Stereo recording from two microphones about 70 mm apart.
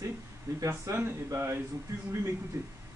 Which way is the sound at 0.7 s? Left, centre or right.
Right.